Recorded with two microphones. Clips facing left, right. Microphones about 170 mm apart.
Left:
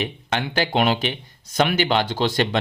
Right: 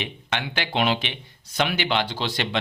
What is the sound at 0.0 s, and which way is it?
Speech, 40° left (ahead or behind).